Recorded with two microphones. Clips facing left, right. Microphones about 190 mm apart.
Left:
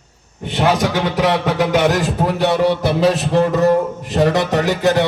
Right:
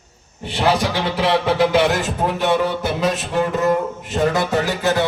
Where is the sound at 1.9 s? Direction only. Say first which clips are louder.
Left 3 dB; 35° left (ahead or behind).